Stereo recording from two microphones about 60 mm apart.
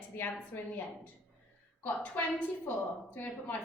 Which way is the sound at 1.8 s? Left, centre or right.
Left.